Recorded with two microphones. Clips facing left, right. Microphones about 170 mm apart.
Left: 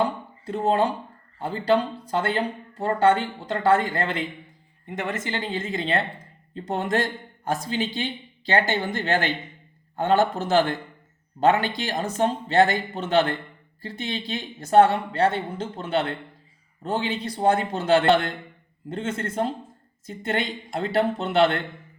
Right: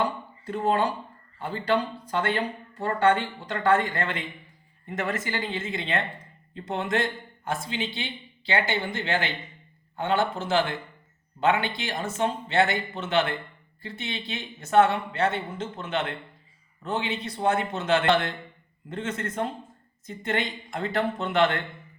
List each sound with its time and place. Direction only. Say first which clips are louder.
0.0 s dishes: left 3 dB; 30° left (ahead or behind)
1.4 s speech: left 4 dB; 30° left (ahead or behind)
4.9 s speech: left 1 dB; 15° left (ahead or behind)
5.4 s speech: left 3 dB; 35° left (ahead or behind)